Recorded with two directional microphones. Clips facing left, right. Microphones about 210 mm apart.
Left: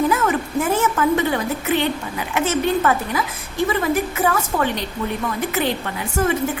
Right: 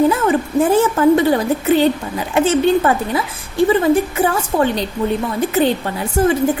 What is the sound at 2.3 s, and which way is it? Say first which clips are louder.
A woman's voice: right 6 dB; 30° right (ahead or behind).